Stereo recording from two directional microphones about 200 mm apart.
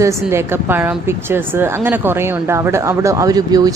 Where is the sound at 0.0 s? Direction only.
15° right (ahead or behind).